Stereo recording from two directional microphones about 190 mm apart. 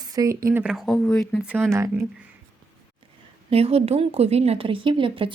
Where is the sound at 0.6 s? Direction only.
Centre (ahead or behind).